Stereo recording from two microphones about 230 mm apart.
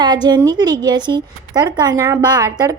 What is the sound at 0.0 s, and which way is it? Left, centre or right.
A woman's voice, centre.